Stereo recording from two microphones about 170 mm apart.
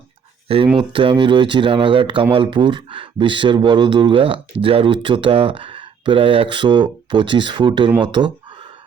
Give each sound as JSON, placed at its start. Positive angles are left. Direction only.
{"t": 0.4, "sound": "speech", "side_deg": -35}